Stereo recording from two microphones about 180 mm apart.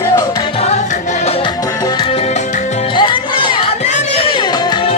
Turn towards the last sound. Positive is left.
turn(degrees=25)  # may be behind; listen again after turning